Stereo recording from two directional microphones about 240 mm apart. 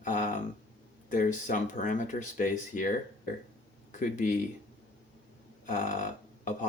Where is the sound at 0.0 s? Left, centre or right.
Left.